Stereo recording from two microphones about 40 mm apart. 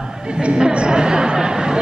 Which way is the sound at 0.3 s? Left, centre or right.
Right.